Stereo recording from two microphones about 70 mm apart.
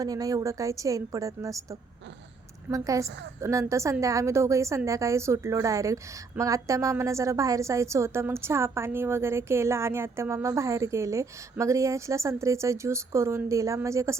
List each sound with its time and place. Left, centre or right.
0.0 s a woman's voice: right
2.7 s a woman's voice: right